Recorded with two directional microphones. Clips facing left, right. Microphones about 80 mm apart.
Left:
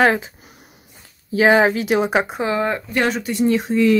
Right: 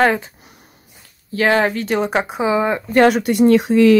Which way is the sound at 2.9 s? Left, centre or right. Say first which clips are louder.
Right 7 dB; right.